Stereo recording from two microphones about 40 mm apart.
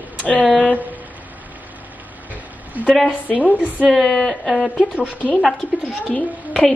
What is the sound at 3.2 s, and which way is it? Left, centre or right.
Speech, left.